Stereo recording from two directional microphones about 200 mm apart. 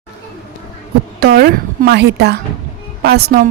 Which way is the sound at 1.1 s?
50° right (ahead or behind).